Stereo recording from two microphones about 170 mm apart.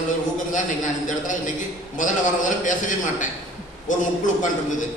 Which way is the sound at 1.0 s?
50° left (ahead or behind).